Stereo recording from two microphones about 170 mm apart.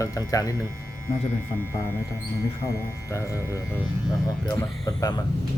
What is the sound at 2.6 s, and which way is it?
Speech, 15° left (ahead or behind).